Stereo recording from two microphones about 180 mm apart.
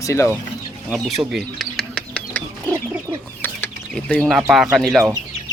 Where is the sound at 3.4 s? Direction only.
10° left (ahead or behind).